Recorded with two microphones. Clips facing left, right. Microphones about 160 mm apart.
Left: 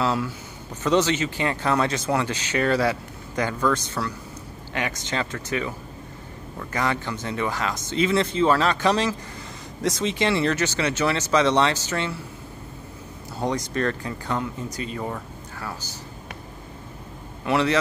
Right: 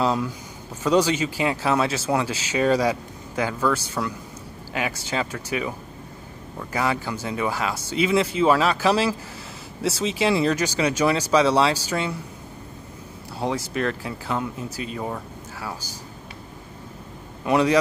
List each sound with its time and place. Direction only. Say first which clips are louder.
0.0 s speech: right 1 dB; 15° right (ahead or behind)
13.4 s speech: even; 5° right (ahead or behind)
17.5 s speech: right 2 dB; 15° right (ahead or behind)